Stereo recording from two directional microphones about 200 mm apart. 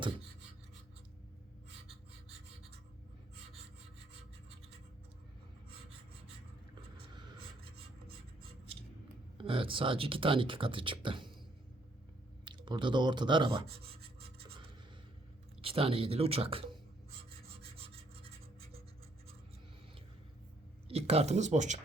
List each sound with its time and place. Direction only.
7.1 s vehicle: 25° right (ahead or behind)
9.4 s speech: 25° right (ahead or behind)
12.5 s speech: 25° right (ahead or behind)
15.6 s speech: 30° right (ahead or behind)
17.6 s rub: 30° right (ahead or behind)
20.8 s speech: 30° right (ahead or behind)